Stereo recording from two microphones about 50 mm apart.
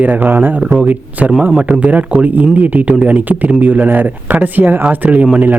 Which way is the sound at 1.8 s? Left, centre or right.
Right.